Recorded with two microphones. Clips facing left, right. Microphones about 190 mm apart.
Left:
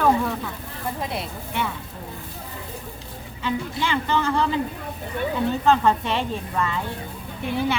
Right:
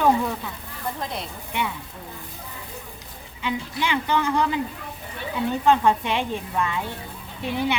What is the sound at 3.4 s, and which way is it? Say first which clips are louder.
Speech: left 1 dB; 15° right (ahead or behind).